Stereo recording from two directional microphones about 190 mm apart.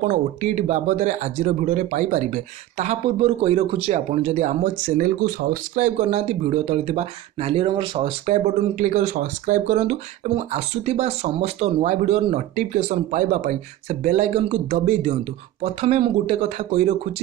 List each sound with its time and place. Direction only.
0.1 s speech: 40° right (ahead or behind)